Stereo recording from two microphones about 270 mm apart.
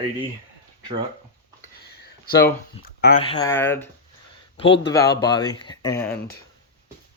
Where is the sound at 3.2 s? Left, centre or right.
Centre.